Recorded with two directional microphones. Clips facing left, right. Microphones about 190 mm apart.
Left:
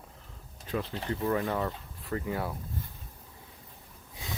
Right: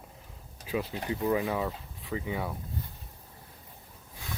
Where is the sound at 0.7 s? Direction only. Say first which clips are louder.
Right 1 dB; 10° right (ahead or behind).